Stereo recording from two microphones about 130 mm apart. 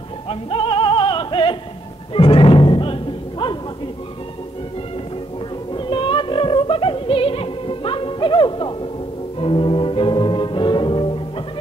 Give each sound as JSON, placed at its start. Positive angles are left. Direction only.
{"t": 0.3, "sound": "music", "side_deg": 45}
{"t": 2.1, "sound": "timpani", "side_deg": 45}
{"t": 5.7, "sound": "music", "side_deg": 40}